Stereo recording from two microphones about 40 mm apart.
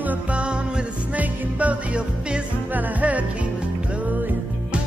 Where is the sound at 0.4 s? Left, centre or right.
Right.